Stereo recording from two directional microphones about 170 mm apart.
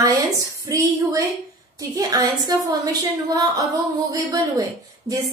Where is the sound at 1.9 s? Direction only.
20° right (ahead or behind).